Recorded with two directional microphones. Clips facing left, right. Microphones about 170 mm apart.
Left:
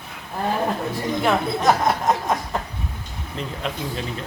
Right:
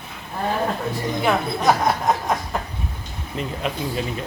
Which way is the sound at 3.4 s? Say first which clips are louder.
Right 2 dB; 5° right (ahead or behind).